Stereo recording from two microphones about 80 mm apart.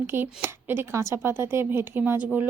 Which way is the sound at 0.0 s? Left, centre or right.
Right.